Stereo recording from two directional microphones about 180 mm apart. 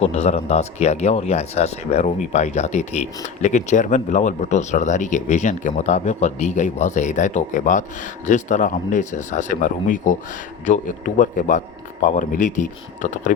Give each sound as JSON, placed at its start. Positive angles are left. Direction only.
{"t": 0.0, "sound": "speech", "side_deg": 35}